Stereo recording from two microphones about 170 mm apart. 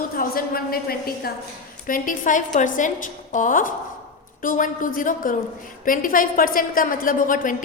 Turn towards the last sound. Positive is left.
turn(degrees=50)  # may be behind; listen again after turning